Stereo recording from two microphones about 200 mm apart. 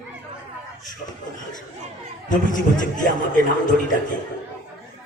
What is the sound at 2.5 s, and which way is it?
Music, 40° left (ahead or behind).